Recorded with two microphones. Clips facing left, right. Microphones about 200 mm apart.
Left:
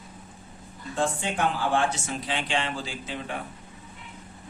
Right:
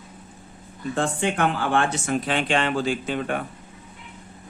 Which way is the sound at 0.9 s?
65° right (ahead or behind).